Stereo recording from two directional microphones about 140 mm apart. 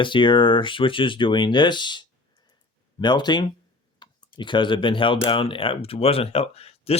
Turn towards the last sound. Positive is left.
turn(degrees=45)  # may be behind; listen again after turning